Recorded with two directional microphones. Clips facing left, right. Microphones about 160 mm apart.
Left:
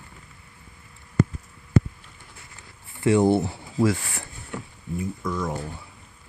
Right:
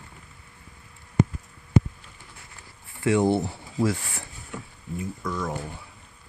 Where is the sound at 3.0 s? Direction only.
30° left (ahead or behind).